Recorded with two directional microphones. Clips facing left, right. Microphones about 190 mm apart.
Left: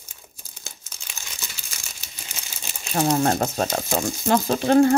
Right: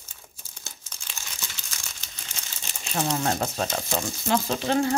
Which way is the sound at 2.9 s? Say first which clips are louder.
Left 6 dB; 45° left (ahead or behind).